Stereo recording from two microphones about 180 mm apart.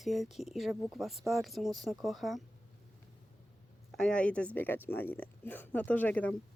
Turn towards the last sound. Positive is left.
turn(degrees=10)  # may be behind; listen again after turning